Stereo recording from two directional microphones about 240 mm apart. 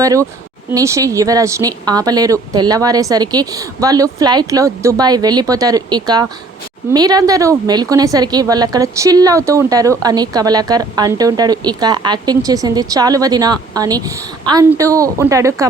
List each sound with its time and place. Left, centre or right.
0.0 s a woman's voice: centre